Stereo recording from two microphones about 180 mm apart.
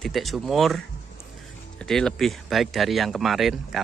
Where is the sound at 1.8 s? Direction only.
5° left (ahead or behind).